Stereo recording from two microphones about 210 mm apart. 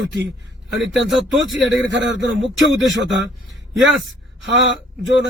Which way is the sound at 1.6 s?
55° right (ahead or behind).